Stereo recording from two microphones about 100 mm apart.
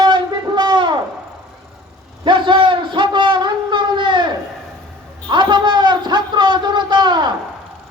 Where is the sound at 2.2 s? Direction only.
55° right (ahead or behind).